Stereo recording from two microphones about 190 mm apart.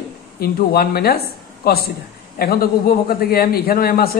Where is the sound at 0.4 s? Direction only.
55° left (ahead or behind).